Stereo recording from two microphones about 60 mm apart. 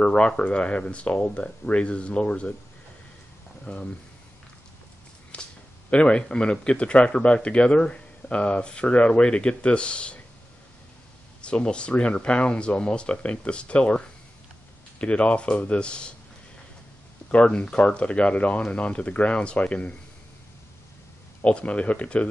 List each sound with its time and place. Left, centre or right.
0.0 s speech: centre
3.6 s speech: centre
5.3 s a sound: centre
5.9 s speech: centre
11.4 s speech: centre
17.3 s speech: centre
21.4 s speech: left